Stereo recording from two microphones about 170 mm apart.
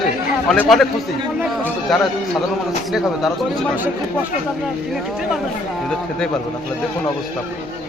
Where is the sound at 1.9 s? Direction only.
Centre (ahead or behind).